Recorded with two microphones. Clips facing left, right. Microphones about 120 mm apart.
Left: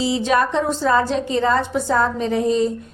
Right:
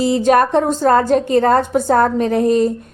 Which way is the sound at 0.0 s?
50° right (ahead or behind).